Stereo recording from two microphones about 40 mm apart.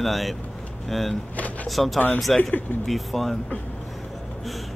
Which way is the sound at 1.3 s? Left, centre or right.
Left.